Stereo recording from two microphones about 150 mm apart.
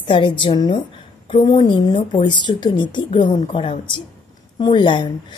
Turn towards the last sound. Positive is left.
turn(degrees=30)  # may be behind; listen again after turning